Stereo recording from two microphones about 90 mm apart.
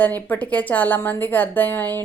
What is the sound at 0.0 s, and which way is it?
A woman's voice, 20° left (ahead or behind).